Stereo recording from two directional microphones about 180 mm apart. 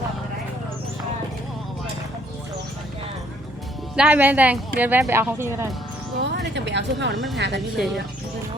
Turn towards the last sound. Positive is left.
turn(degrees=0)  # may be behind; listen again after turning